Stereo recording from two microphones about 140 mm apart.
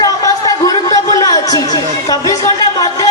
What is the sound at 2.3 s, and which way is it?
Speech, 25° left (ahead or behind).